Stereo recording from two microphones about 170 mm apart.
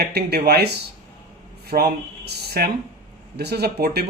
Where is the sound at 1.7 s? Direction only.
65° right (ahead or behind).